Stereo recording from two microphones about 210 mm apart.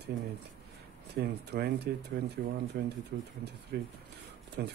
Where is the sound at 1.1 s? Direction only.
50° right (ahead or behind).